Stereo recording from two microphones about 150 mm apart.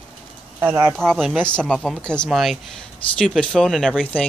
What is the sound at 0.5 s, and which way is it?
Speech, 15° right (ahead or behind).